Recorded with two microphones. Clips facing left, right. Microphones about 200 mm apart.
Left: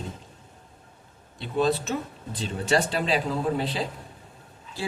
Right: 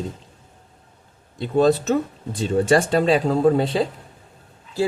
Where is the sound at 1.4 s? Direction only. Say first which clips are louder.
Right 7 dB; 45° right (ahead or behind).